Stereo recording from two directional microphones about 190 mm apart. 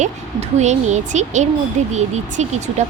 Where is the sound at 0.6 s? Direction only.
40° right (ahead or behind).